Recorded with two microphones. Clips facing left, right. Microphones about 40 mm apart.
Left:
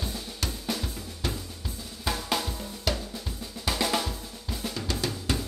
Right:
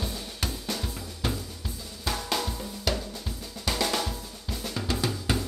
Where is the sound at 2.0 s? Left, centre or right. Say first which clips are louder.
Even; centre.